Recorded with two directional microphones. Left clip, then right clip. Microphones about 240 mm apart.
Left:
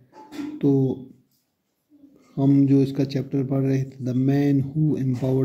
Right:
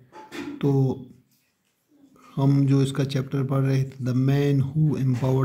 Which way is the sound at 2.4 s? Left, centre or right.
Right.